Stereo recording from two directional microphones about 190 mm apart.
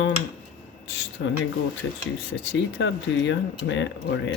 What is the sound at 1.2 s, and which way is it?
Speech, 65° left (ahead or behind).